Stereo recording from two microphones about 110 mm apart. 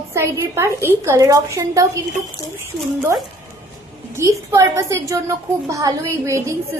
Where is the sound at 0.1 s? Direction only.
25° right (ahead or behind).